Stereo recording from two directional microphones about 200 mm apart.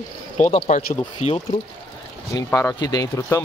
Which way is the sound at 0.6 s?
35° left (ahead or behind).